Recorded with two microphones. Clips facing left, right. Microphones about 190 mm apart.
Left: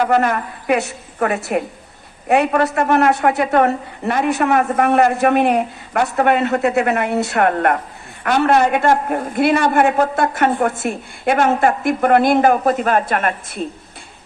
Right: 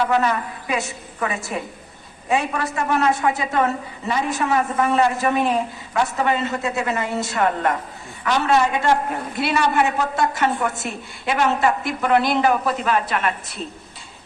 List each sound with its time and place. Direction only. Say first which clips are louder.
0.0 s a woman's voice: left 4 dB; 50° left (ahead or behind)